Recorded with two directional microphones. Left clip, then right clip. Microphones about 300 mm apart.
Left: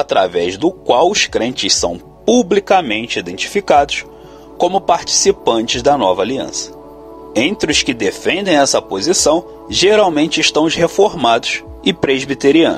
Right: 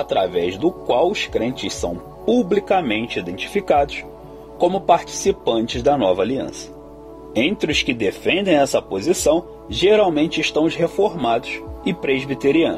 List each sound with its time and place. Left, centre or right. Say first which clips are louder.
0.0 s speech: left 5 dB; centre